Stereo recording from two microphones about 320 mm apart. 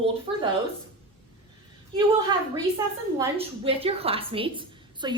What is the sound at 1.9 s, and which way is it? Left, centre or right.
A woman's voice, centre.